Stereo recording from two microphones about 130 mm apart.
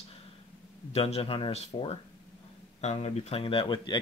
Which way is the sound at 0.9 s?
50° left (ahead or behind).